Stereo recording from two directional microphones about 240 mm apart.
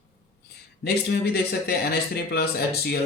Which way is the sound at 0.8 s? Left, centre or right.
Left.